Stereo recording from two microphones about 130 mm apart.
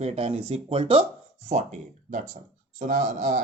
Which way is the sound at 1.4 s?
65° right (ahead or behind).